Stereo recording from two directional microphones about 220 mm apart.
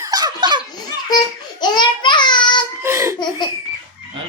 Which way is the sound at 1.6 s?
20° left (ahead or behind).